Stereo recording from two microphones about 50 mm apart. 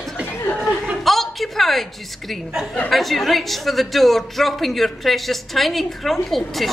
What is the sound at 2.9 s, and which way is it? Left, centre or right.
A woman's voice, centre.